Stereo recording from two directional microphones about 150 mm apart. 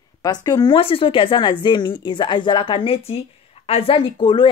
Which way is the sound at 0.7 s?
40° left (ahead or behind).